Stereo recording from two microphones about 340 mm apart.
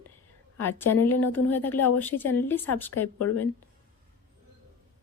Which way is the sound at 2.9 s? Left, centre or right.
Left.